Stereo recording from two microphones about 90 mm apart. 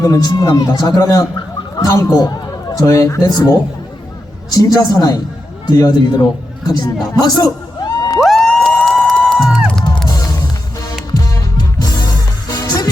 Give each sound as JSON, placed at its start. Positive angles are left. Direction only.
{"t": 0.0, "sound": "a man's voice", "side_deg": 45}
{"t": 4.5, "sound": "a man's voice", "side_deg": 45}
{"t": 7.2, "sound": "a sound", "side_deg": 45}
{"t": 8.2, "sound": "music", "side_deg": 5}
{"t": 11.2, "sound": "music", "side_deg": 40}